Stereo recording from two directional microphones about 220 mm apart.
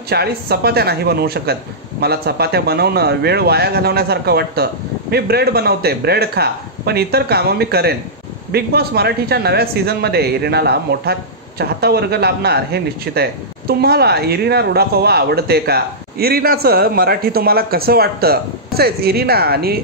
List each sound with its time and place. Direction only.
0.1 s speech: 45° right (ahead or behind)